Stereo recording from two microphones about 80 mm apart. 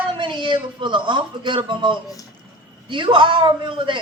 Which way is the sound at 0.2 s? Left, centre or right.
Right.